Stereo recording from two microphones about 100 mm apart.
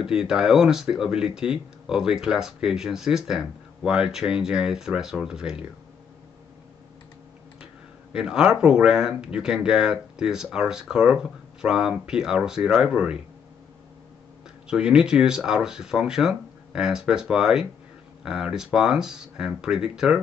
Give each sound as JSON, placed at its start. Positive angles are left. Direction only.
{"t": 0.0, "sound": "speech", "side_deg": -5}
{"t": 8.1, "sound": "speech", "side_deg": -10}
{"t": 14.7, "sound": "speech", "side_deg": -10}